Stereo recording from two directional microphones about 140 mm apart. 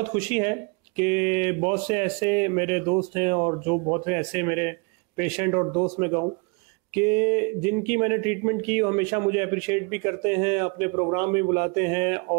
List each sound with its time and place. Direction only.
0.0 s speech: 15° right (ahead or behind)